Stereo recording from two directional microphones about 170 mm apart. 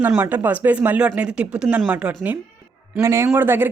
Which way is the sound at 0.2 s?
10° right (ahead or behind).